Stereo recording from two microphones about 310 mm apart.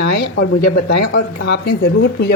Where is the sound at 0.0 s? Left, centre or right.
Left.